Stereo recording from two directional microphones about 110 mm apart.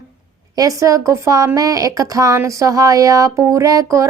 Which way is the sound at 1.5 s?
30° right (ahead or behind).